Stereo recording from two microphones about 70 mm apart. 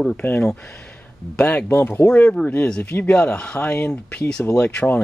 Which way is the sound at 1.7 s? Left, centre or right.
Left.